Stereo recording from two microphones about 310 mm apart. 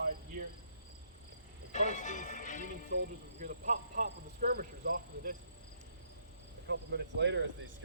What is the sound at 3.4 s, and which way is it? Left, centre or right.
Speech, right.